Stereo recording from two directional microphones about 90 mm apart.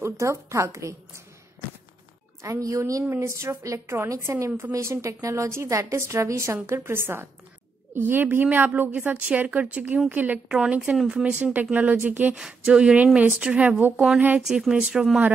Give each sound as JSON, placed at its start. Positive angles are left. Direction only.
{"t": 0.0, "sound": "a woman's voice", "side_deg": -35}
{"t": 2.4, "sound": "a woman's voice", "side_deg": -35}
{"t": 4.5, "sound": "a woman's voice", "side_deg": -20}
{"t": 4.7, "sound": "a woman's voice", "side_deg": -30}
{"t": 10.6, "sound": "speech", "side_deg": -5}
{"t": 12.4, "sound": "speech", "side_deg": -5}
{"t": 14.4, "sound": "speech", "side_deg": -5}